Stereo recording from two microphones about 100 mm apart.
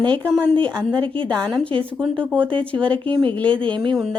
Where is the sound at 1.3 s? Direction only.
5° left (ahead or behind).